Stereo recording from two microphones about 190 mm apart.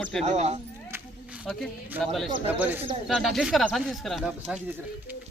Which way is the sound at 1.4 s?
Centre (ahead or behind).